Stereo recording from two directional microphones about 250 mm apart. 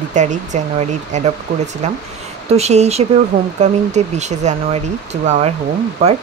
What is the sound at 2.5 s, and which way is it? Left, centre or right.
Speech, right.